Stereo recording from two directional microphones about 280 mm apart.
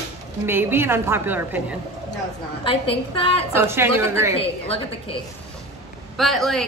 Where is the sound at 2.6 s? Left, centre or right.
Centre.